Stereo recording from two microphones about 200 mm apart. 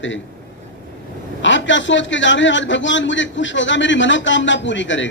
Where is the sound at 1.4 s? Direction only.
65° left (ahead or behind).